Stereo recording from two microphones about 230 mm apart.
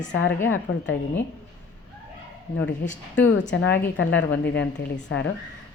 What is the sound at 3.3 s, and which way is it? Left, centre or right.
A woman's voice, left.